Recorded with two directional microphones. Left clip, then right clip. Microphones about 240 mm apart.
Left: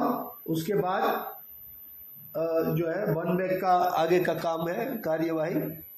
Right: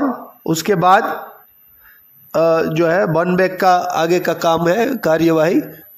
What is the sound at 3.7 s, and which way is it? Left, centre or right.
A man's voice, right.